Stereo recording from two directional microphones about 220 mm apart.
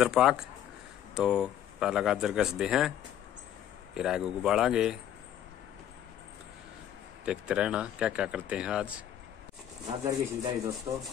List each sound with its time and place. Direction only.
0.0 s speech: centre (ahead or behind)
3.9 s speech: 5° right (ahead or behind)
7.2 s speech: 5° right (ahead or behind)
9.8 s speech: 15° right (ahead or behind)